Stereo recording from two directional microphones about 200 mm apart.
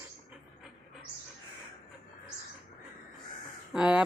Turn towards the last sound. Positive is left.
turn(degrees=-5)  # may be behind; listen again after turning